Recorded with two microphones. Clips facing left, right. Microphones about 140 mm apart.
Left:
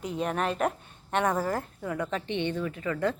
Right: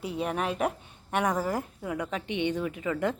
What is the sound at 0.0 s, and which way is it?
A woman's voice, 5° right (ahead or behind).